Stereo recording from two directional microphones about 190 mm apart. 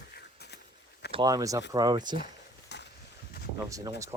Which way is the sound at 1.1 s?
20° right (ahead or behind).